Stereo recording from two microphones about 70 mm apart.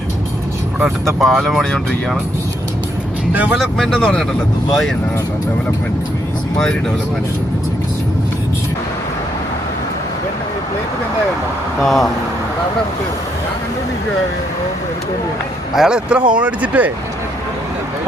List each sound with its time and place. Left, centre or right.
1.0 s speech: centre
3.6 s speech: centre
11.8 s speech: centre
15.7 s speech: centre